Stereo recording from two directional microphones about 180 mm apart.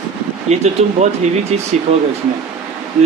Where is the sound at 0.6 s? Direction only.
35° right (ahead or behind).